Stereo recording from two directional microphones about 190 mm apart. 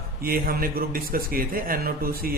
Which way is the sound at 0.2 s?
50° right (ahead or behind).